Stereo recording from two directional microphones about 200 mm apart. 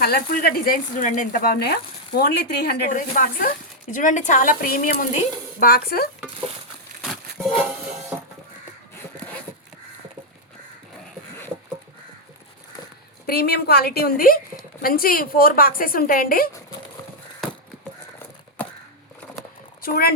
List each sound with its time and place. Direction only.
0.0 s speech: 50° left (ahead or behind)
2.9 s a woman's voice: 40° left (ahead or behind)
7.0 s music: centre (ahead or behind)
13.2 s speech: 50° left (ahead or behind)
19.8 s speech: 50° left (ahead or behind)